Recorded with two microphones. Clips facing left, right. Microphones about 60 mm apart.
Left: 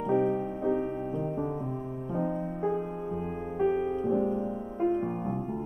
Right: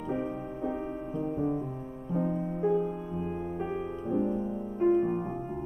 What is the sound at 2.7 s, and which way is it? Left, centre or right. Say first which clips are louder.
Music: right 2 dB; left.